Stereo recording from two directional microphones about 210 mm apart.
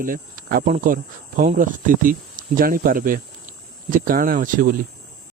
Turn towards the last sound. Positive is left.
turn(degrees=-40)  # may be behind; listen again after turning